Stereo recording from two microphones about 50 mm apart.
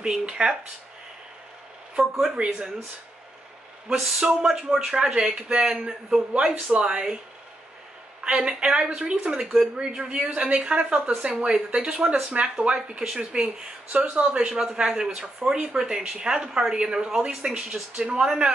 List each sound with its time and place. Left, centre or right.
0.0 s a woman's voice: centre
2.3 s a woman's voice: right
4.2 s a man's voice: centre
8.2 s a man's voice: right; by 9.7 s centre
9.8 s a woman's voice: centre